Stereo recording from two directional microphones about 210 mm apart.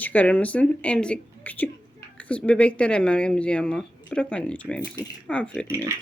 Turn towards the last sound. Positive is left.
turn(degrees=-10)  # may be behind; listen again after turning